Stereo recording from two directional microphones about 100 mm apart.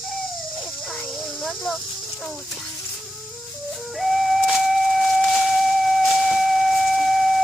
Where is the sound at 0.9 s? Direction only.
5° left (ahead or behind).